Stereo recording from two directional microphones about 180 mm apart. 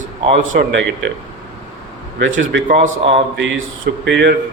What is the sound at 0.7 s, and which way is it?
Speech, 90° right.